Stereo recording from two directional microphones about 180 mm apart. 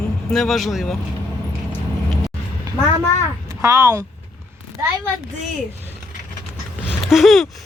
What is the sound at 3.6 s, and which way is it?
Speech, 15° right (ahead or behind).